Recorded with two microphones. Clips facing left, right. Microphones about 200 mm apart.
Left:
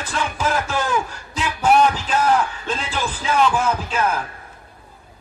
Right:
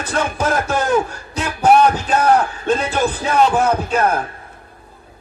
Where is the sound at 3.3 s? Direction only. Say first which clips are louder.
Right 4 dB; 40° right (ahead or behind).